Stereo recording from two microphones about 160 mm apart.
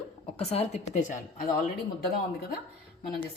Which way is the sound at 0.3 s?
40° left (ahead or behind).